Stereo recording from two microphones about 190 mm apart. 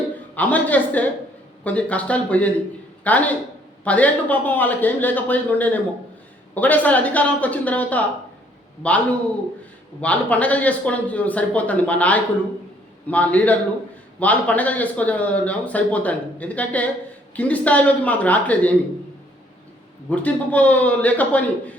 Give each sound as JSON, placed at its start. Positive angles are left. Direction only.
{"t": 0.3, "sound": "a woman's voice", "side_deg": 10}
{"t": 20.1, "sound": "speech", "side_deg": 10}